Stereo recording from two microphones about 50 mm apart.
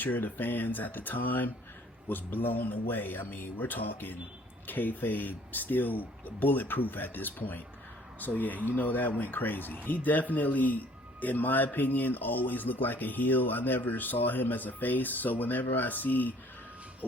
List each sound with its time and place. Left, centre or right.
0.0 s speech: left